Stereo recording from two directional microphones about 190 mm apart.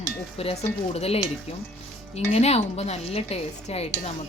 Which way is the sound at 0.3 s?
35° left (ahead or behind).